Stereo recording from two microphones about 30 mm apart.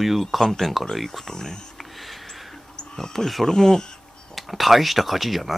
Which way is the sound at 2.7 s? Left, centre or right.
Left.